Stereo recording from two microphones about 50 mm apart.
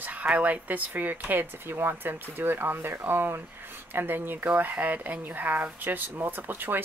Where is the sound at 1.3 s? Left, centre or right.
Right.